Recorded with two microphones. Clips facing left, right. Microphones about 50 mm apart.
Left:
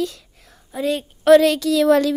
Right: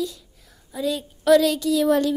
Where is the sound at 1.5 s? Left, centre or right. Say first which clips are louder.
Left 4 dB; left.